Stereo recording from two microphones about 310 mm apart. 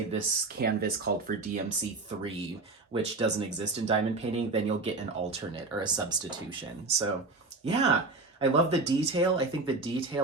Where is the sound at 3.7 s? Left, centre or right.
Centre.